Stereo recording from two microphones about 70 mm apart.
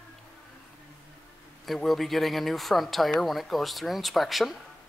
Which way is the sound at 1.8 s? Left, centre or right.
Centre.